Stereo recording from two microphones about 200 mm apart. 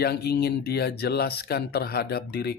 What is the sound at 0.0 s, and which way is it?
Speech, 55° left (ahead or behind).